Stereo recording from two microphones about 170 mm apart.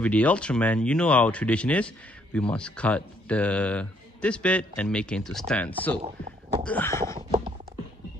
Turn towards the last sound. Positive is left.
turn(degrees=15)  # may be behind; listen again after turning